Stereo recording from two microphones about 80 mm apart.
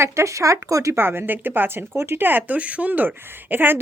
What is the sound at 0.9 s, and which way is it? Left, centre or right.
Speech, right.